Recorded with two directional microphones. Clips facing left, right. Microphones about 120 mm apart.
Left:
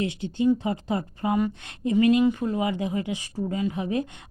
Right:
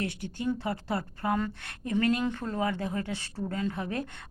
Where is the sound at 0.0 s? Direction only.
20° left (ahead or behind).